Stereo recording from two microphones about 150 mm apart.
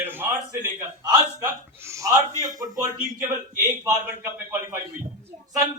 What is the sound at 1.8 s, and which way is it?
A man's voice, 20° right (ahead or behind).